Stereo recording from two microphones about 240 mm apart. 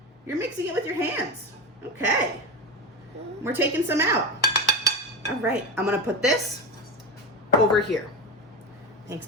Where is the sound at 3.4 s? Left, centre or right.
Centre.